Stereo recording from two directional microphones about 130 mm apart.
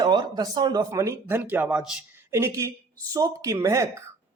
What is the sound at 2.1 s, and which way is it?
Speech, 20° right (ahead or behind).